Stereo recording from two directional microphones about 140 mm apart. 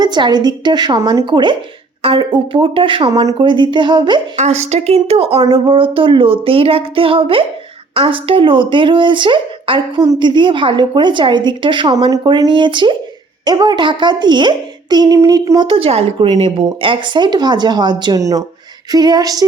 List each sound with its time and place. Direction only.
0.0 s speech: 30° right (ahead or behind)
4.4 s speech: 50° right (ahead or behind); by 18.4 s 25° right (ahead or behind)
18.9 s female singing: 30° right (ahead or behind)